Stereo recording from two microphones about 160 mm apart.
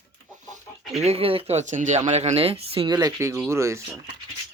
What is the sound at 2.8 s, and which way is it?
Speech, 25° right (ahead or behind).